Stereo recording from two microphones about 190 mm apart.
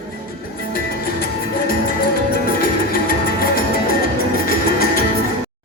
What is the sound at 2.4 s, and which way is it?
Music, 50° left (ahead or behind).